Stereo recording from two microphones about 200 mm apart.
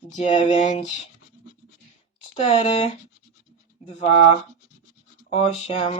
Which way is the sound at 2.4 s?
30° left (ahead or behind).